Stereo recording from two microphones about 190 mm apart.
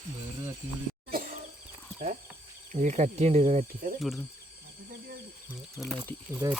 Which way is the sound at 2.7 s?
40° right (ahead or behind).